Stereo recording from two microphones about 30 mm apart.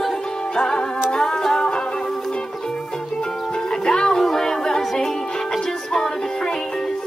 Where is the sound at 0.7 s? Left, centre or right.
Left.